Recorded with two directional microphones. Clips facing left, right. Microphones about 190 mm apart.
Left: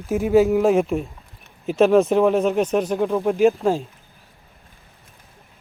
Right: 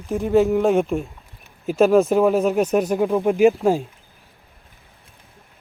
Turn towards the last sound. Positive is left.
turn(degrees=-10)  # may be behind; listen again after turning